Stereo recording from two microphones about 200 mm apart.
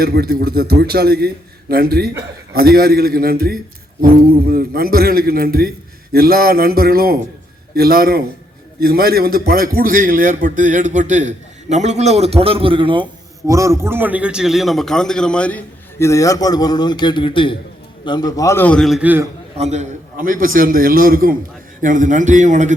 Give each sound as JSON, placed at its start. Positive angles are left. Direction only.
{"t": 0.0, "sound": "a man's voice", "side_deg": -50}
{"t": 13.5, "sound": "a man's voice", "side_deg": -15}
{"t": 19.5, "sound": "a man's voice", "side_deg": -35}